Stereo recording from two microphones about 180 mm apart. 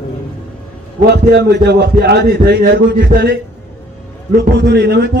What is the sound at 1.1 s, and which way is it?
A man's voice, 65° right (ahead or behind).